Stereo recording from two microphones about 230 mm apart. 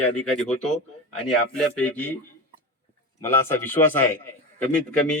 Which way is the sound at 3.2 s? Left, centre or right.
Centre.